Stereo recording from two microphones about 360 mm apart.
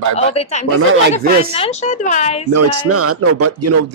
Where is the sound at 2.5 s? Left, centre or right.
Right.